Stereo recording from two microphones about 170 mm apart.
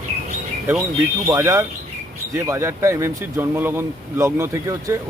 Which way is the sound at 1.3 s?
15° right (ahead or behind).